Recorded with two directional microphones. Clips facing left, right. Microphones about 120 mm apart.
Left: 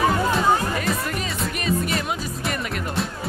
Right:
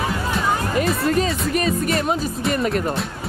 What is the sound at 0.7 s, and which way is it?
Music, 30° right (ahead or behind).